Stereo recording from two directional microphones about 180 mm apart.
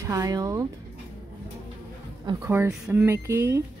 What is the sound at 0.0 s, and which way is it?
Speech, 20° right (ahead or behind).